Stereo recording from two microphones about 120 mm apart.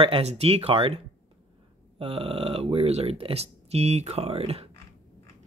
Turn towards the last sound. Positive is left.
turn(degrees=-55)  # may be behind; listen again after turning